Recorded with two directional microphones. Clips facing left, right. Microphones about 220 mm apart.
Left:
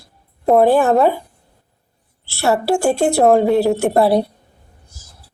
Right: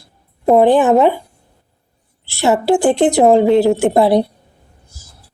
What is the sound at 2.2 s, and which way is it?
A woman's voice, 15° right (ahead or behind).